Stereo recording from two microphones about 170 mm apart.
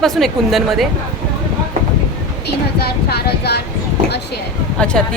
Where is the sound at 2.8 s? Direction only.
70° left (ahead or behind).